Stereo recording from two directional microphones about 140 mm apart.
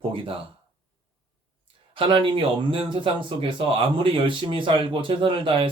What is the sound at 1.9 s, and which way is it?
Speech, 35° right (ahead or behind).